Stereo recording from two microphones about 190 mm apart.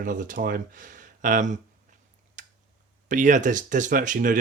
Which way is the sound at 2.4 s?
40° right (ahead or behind).